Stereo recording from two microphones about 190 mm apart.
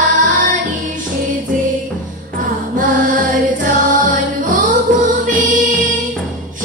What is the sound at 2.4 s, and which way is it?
Music, 45° right (ahead or behind).